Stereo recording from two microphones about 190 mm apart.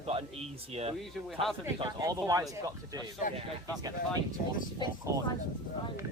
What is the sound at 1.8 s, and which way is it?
Speech, 20° right (ahead or behind).